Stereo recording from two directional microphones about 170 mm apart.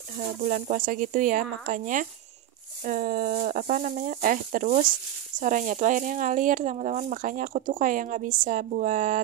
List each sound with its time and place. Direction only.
0.4 s speech: 45° right (ahead or behind)